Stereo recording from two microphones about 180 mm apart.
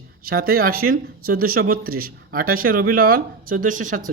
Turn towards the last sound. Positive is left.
turn(degrees=-45)  # may be behind; listen again after turning